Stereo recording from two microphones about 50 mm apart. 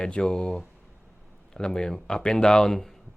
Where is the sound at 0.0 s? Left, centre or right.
Centre.